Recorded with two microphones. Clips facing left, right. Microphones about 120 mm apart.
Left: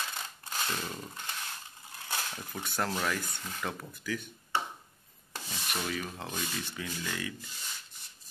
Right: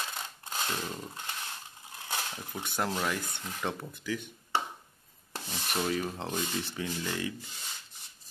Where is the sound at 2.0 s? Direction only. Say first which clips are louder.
Right 1 dB; 15° right (ahead or behind).